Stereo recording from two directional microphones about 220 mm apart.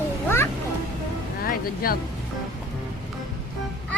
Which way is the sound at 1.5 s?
40° left (ahead or behind).